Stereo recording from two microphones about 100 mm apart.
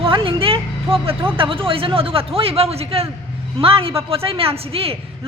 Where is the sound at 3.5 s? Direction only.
65° right (ahead or behind).